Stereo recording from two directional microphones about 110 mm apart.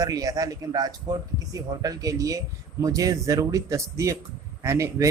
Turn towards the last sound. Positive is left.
turn(degrees=-25)  # may be behind; listen again after turning